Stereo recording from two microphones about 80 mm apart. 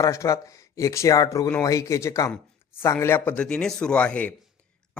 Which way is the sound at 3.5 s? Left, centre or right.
Centre.